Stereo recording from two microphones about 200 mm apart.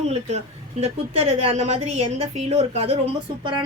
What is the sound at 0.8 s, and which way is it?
A woman's voice, 30° right (ahead or behind).